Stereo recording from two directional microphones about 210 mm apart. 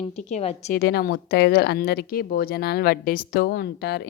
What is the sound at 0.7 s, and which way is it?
Speech, 45° left (ahead or behind).